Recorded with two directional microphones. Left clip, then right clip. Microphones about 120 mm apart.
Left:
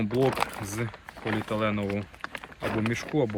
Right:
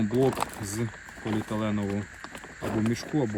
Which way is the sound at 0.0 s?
15° right (ahead or behind).